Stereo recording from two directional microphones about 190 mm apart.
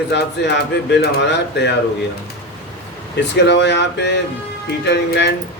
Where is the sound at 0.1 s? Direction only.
65° left (ahead or behind).